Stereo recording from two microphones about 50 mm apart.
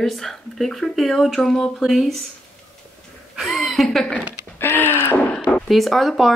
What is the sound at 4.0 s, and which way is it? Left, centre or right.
Speech, centre.